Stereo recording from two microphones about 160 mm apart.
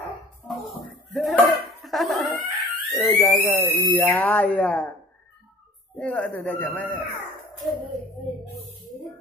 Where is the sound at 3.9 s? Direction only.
10° left (ahead or behind).